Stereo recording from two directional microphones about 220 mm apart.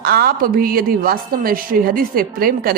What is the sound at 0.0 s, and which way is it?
A woman's voice, 45° right (ahead or behind).